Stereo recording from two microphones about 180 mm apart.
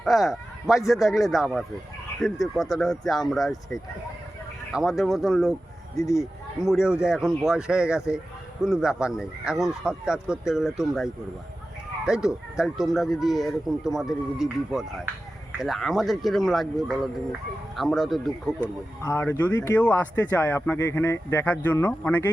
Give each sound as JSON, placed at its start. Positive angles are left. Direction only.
{"t": 0.0, "sound": "speech", "side_deg": 0}
{"t": 6.0, "sound": "speech", "side_deg": 15}
{"t": 6.7, "sound": "speech", "side_deg": -5}
{"t": 19.0, "sound": "speech", "side_deg": 15}